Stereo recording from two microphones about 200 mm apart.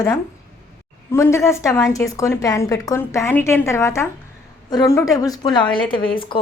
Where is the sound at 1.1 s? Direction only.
15° left (ahead or behind).